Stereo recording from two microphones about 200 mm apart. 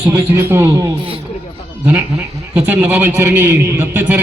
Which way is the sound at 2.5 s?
10° right (ahead or behind).